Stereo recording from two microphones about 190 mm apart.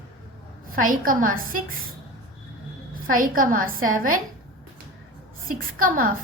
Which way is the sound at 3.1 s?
45° right (ahead or behind).